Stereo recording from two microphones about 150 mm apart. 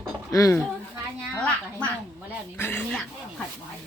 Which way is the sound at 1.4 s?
10° left (ahead or behind).